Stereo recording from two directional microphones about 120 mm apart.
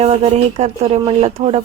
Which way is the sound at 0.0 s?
60° right (ahead or behind).